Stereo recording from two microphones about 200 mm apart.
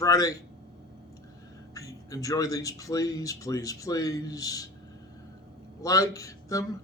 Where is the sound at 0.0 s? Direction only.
15° left (ahead or behind).